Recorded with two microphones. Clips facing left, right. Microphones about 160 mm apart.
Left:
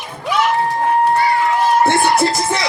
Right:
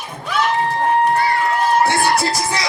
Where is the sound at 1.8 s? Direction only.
20° left (ahead or behind).